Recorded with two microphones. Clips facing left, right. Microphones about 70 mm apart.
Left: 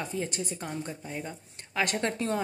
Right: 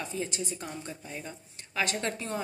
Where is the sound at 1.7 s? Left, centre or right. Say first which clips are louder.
Left 2 dB; left.